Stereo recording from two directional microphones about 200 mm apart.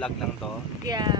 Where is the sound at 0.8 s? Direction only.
20° right (ahead or behind).